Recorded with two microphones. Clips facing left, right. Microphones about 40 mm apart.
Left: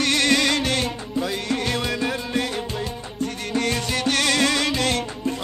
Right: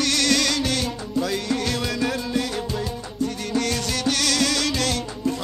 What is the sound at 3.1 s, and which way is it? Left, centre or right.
Music, left.